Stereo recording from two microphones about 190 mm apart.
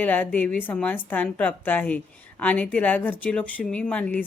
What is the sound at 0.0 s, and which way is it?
A woman's voice, 10° left (ahead or behind).